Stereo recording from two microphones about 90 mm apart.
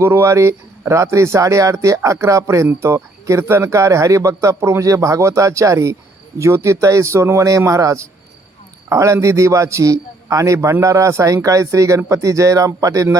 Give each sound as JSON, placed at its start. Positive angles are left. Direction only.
{"t": 0.0, "sound": "speech", "side_deg": -30}